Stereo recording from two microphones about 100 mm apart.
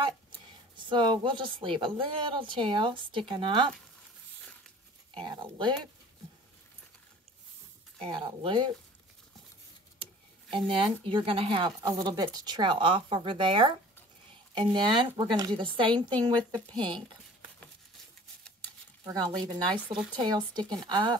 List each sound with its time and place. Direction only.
0.7 s speech: 50° right (ahead or behind)
5.1 s speech: 55° right (ahead or behind)
8.0 s speech: 60° right (ahead or behind)
10.5 s speech: 60° right (ahead or behind)
19.0 s speech: 45° right (ahead or behind)